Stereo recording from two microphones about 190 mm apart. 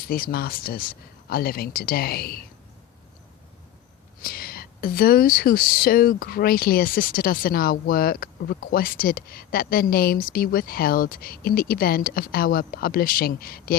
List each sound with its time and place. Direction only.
0.0 s speech: 50° left (ahead or behind)
4.2 s speech: 50° left (ahead or behind)